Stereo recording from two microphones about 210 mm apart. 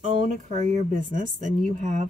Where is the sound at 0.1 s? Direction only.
35° right (ahead or behind).